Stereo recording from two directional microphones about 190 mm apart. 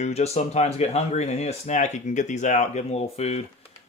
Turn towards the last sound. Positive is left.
turn(degrees=35)  # may be behind; listen again after turning